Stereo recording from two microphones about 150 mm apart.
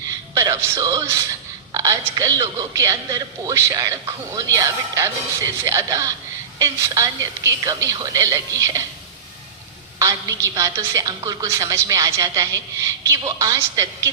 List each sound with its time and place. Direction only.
0.3 s a man's voice: 20° right (ahead or behind)
10.0 s a man's voice: 20° right (ahead or behind)